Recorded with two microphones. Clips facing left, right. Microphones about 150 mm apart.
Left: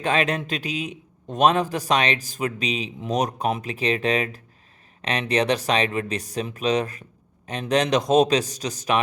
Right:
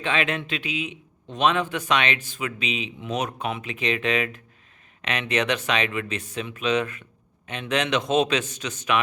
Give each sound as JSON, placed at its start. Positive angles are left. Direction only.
{"t": 0.0, "sound": "a man's voice", "side_deg": 40}